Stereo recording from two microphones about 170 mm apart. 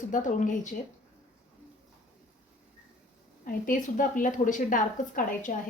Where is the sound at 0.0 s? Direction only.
50° left (ahead or behind).